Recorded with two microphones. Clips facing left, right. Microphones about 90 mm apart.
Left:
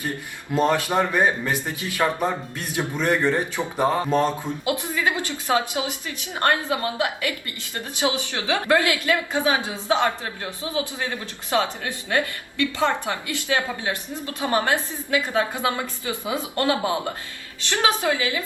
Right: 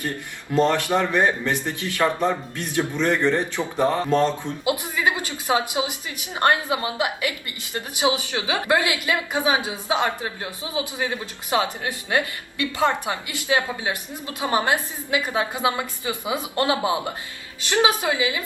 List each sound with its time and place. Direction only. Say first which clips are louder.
0.5 s speech: right 1 dB; 15° left (ahead or behind)
4.8 s a woman's voice: right 1 dB; 20° right (ahead or behind)